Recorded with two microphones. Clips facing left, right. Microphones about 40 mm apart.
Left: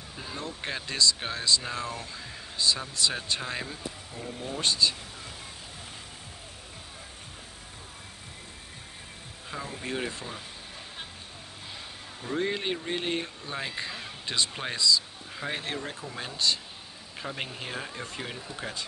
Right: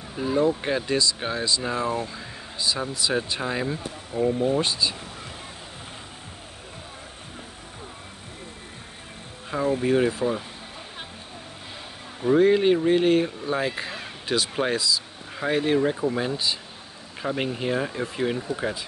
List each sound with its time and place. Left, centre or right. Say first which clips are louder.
0.1 s speech: right 16 dB; centre
3.6 s speech: right 8 dB; right
9.5 s speech: right 13 dB; centre
12.2 s speech: right 12 dB; centre
12.4 s speech: right 12 dB; centre